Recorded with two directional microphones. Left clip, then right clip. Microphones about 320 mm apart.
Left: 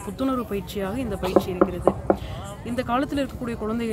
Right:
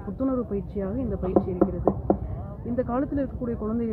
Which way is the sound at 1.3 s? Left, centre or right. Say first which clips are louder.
Left 3 dB; left.